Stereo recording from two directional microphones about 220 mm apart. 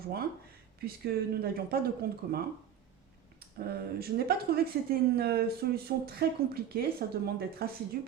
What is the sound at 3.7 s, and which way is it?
Speech, 45° right (ahead or behind).